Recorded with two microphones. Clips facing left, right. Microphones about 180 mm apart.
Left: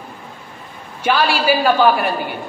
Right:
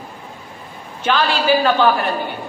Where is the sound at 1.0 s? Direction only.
10° left (ahead or behind).